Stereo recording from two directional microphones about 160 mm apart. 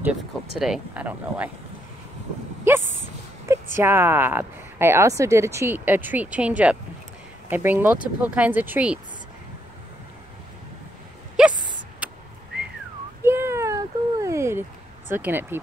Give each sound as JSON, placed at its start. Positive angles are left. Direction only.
{"t": 0.6, "sound": "speech", "side_deg": -5}
{"t": 3.7, "sound": "speech", "side_deg": -15}
{"t": 11.4, "sound": "a sound", "side_deg": -5}
{"t": 12.0, "sound": "vehicle", "side_deg": -10}
{"t": 13.2, "sound": "a sound", "side_deg": -15}
{"t": 15.0, "sound": "speech", "side_deg": -15}